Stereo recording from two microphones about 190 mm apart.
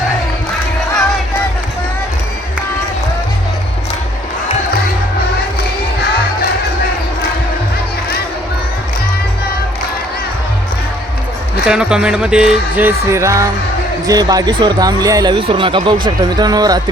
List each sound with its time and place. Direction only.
11.6 s speech: 5° right (ahead or behind); by 16.8 s 20° right (ahead or behind)